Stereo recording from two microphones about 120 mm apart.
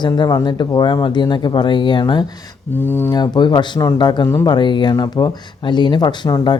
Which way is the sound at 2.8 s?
15° left (ahead or behind).